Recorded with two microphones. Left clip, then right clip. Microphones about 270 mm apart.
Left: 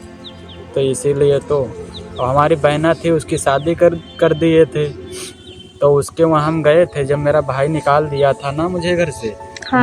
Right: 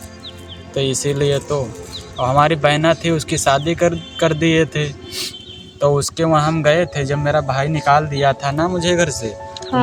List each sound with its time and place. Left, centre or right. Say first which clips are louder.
0.7 s speech: left 4 dB; right